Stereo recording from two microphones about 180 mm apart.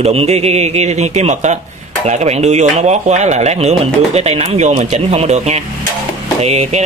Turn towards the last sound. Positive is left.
turn(degrees=-35)  # may be behind; listen again after turning